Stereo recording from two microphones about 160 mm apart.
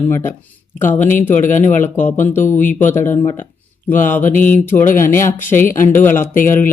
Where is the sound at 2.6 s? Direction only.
55° left (ahead or behind).